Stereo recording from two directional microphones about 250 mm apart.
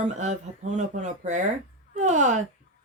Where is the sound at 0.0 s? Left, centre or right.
Right.